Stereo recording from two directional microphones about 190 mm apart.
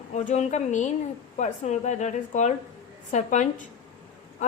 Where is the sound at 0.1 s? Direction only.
40° left (ahead or behind).